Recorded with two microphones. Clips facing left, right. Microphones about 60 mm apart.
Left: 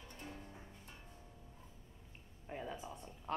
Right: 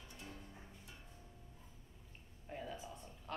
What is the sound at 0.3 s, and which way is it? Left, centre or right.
Music, centre.